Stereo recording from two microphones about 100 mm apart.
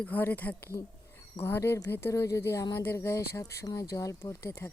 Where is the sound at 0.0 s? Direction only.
15° left (ahead or behind).